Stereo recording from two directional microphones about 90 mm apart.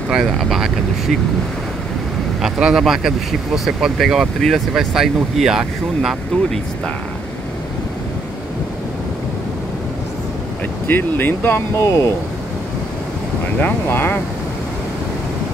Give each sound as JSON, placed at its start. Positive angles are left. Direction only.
{"t": 0.1, "sound": "speech", "side_deg": 0}
{"t": 2.4, "sound": "speech", "side_deg": -5}
{"t": 10.9, "sound": "speech", "side_deg": 20}
{"t": 13.6, "sound": "speech", "side_deg": 20}